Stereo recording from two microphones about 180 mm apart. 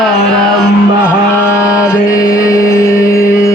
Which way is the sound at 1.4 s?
15° left (ahead or behind).